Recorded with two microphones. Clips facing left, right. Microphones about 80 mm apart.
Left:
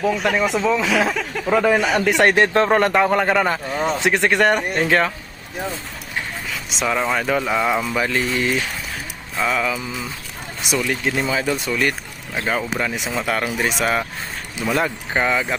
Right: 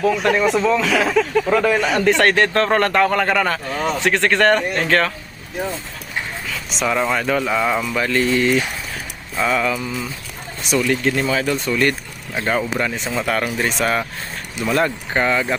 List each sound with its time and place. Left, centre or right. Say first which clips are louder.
0.0 s a man's voice: right 2 dB; centre
6.7 s a man's voice: right 2 dB; centre